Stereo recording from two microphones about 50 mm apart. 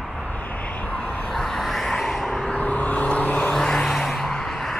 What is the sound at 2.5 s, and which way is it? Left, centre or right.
Vehicle, left.